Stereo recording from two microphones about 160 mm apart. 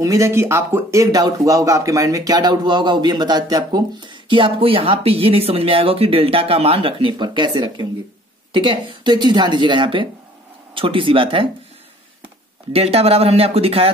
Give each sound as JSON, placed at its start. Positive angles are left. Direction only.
{"t": 0.0, "sound": "speech", "side_deg": -20}
{"t": 12.7, "sound": "speech", "side_deg": -40}